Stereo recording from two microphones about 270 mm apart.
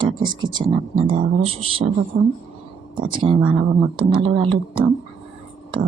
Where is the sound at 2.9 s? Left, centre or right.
Centre.